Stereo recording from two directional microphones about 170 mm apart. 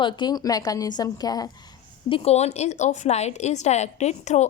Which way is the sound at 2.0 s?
35° left (ahead or behind).